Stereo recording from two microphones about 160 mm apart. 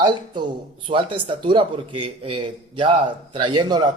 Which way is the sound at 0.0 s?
30° right (ahead or behind).